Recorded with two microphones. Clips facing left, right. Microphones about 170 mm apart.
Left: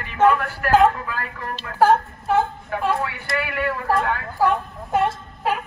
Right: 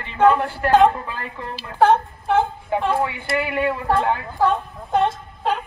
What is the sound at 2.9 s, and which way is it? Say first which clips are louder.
A man's voice: right 3 dB; 25° right (ahead or behind).